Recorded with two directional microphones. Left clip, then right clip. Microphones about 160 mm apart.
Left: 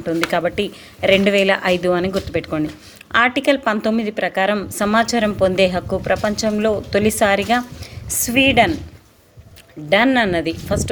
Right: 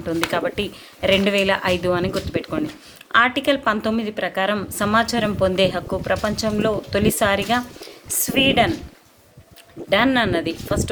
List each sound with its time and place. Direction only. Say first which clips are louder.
0.0 s a woman's voice: left 3 dB; 20° left (ahead or behind)
9.9 s speech: left 3 dB; 15° left (ahead or behind)